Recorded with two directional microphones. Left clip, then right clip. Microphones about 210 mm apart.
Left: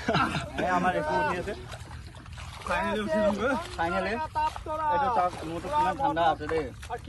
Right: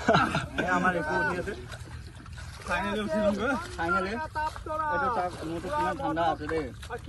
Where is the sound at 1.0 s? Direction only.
45° left (ahead or behind).